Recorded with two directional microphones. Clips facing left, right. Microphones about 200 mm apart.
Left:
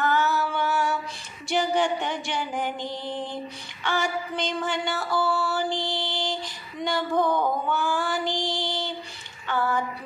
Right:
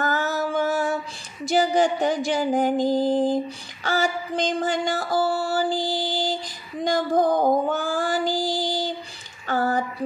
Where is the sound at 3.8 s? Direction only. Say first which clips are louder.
Right 3 dB; 40° right (ahead or behind).